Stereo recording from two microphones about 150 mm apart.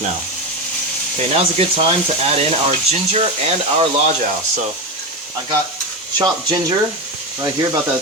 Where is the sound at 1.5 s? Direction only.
45° right (ahead or behind).